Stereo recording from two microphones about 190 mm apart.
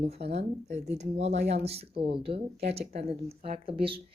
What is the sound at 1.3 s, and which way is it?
Speech, 65° right (ahead or behind).